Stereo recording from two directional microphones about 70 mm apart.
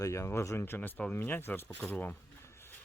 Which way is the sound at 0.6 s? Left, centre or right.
Left.